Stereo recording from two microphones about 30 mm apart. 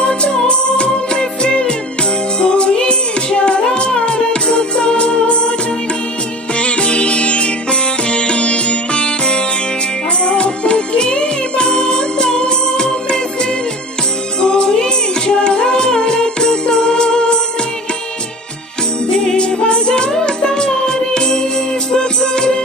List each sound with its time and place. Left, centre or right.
0.5 s music of bollywood: left
2.4 s music: left
6.6 s music: left
14.4 s music: left
19.0 s jingle bell: left
19.3 s music: left